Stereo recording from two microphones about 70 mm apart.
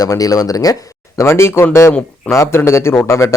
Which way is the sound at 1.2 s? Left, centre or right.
Left.